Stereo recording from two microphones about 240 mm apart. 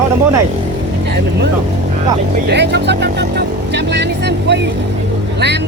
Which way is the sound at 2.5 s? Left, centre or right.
Right.